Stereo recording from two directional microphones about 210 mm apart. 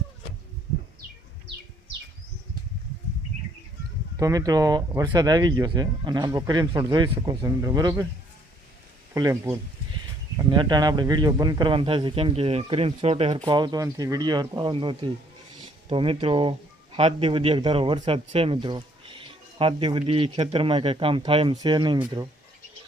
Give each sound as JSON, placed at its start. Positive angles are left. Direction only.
{"t": 4.2, "sound": "speech", "side_deg": -15}
{"t": 9.1, "sound": "speech", "side_deg": -15}